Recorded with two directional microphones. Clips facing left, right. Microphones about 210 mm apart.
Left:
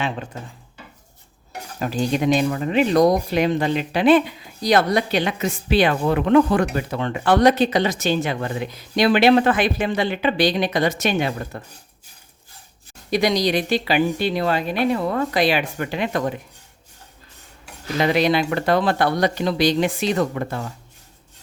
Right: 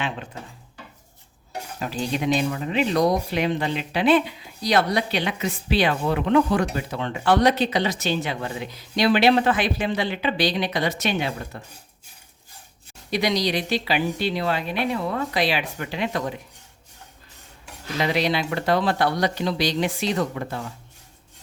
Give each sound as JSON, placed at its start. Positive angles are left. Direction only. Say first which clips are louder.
{"t": 1.8, "sound": "speech", "louder": "left 5 dB", "side_deg": 45}
{"t": 13.1, "sound": "speech", "louder": "left 4 dB", "side_deg": 45}
{"t": 18.0, "sound": "speech", "louder": "left 5 dB", "side_deg": 50}